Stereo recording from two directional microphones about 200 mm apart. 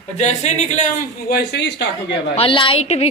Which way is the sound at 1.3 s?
55° left (ahead or behind).